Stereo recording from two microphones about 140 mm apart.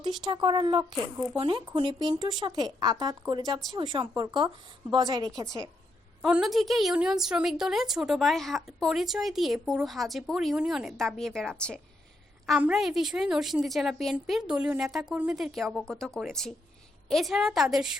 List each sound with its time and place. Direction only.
0.3 s speech: 35° right (ahead or behind)
6.2 s a woman's voice: 5° right (ahead or behind)
12.5 s a woman's voice: 5° right (ahead or behind)